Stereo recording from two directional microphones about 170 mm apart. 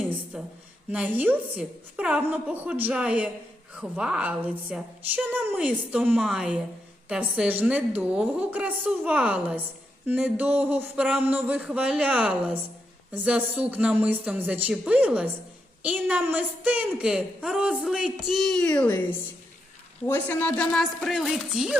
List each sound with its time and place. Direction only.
0.3 s a woman's voice: 5° right (ahead or behind)
20.1 s a woman's voice: 10° left (ahead or behind)